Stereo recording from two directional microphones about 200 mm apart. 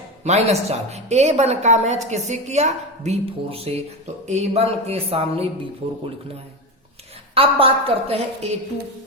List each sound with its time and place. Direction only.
0.3 s a woman's voice: 35° right (ahead or behind)
4.3 s music: 30° right (ahead or behind)
7.3 s music: 30° right (ahead or behind)